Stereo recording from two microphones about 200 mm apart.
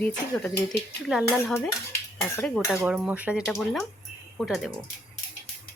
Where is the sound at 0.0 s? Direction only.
5° left (ahead or behind).